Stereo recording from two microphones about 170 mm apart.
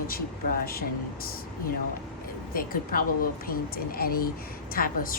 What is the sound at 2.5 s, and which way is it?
Speech, 55° left (ahead or behind).